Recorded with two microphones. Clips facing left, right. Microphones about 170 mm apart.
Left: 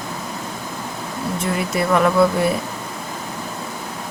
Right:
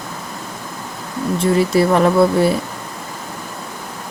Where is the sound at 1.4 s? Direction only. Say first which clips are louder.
Right 8 dB; 30° right (ahead or behind).